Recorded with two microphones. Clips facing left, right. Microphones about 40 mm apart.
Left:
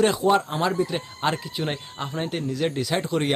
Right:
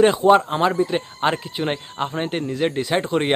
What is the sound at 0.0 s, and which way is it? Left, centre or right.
Speech, right.